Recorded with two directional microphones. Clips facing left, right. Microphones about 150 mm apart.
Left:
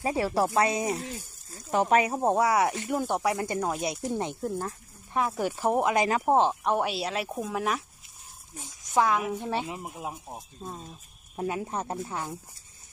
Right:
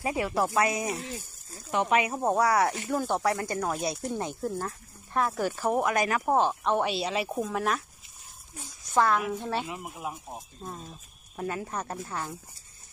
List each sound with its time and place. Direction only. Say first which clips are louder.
0.0 s speech: left 2 dB; 30° left (ahead or behind)
1.7 s speech: left 2 dB; 40° left (ahead or behind)
2.1 s speech: left 1 dB; 20° left (ahead or behind)
8.9 s speech: even; 10° left (ahead or behind)